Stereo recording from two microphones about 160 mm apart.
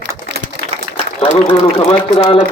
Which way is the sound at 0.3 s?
90° right.